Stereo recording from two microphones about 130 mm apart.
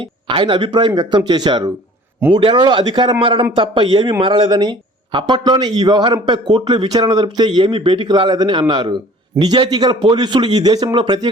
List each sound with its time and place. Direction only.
0.0 s speech: 40° right (ahead or behind)